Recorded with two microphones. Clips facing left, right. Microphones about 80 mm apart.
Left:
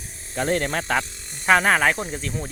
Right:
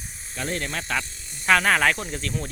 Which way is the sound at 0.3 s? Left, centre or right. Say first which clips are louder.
Left 6 dB; left.